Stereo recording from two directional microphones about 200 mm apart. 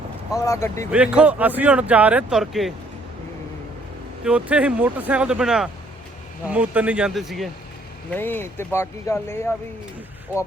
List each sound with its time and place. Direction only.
0.3 s speech: 15° left (ahead or behind)
0.9 s speech: 5° right (ahead or behind)
4.2 s speech: 5° right (ahead or behind); by 9.5 s 10° left (ahead or behind)